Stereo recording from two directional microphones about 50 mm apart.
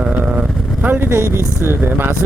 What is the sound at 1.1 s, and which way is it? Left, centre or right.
Speech, right.